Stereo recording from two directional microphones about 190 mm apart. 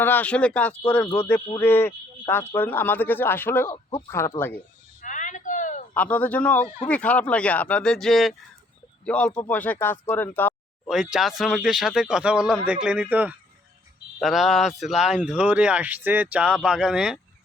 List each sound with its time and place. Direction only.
0.0 s speech: 10° left (ahead or behind)
4.9 s a sound: 40° left (ahead or behind)
5.9 s speech: 10° left (ahead or behind)
10.8 s speech: 5° right (ahead or behind)